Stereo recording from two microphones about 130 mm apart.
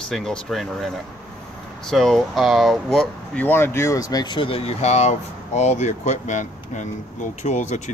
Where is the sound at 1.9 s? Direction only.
5° left (ahead or behind).